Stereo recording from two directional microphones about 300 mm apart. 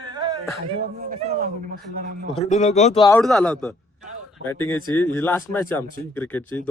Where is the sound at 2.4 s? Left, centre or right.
Left.